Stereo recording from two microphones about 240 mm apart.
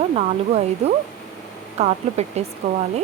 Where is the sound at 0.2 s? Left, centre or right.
Right.